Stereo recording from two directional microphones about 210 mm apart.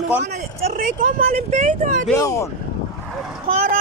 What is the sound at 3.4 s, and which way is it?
Speech, 40° right (ahead or behind).